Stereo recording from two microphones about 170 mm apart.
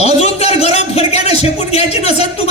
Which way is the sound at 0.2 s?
35° left (ahead or behind).